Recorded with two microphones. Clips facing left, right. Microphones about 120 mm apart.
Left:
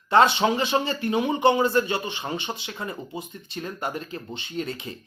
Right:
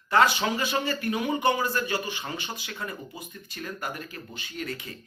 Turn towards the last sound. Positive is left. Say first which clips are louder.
# left 4 dB
turn(degrees=25)  # may be behind; listen again after turning